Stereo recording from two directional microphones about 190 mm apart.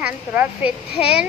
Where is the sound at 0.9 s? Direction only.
30° left (ahead or behind).